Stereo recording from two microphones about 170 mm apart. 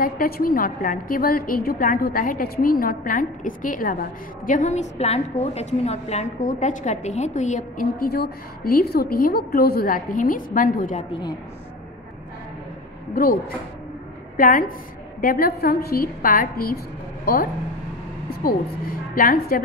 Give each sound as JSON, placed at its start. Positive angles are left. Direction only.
{"t": 0.0, "sound": "a woman's voice", "side_deg": 55}
{"t": 13.1, "sound": "a woman's voice", "side_deg": 60}